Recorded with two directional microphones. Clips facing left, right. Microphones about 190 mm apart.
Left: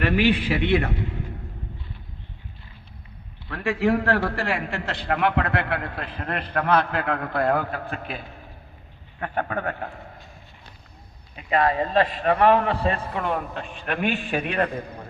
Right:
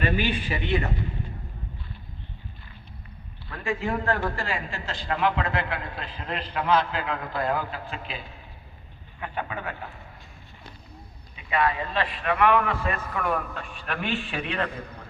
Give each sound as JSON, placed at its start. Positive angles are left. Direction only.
{"t": 0.0, "sound": "a man's voice", "side_deg": 75}
{"t": 3.5, "sound": "a man's voice", "side_deg": 75}
{"t": 9.2, "sound": "speech", "side_deg": 50}
{"t": 11.3, "sound": "a man's voice", "side_deg": 40}
{"t": 14.3, "sound": "speech", "side_deg": 45}